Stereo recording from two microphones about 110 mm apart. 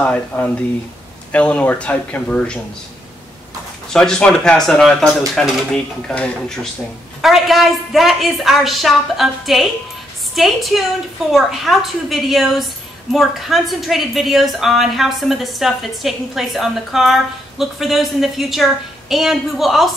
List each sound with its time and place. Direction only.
0.0 s speech: 10° left (ahead or behind)
3.9 s a woman's voice: 5° left (ahead or behind)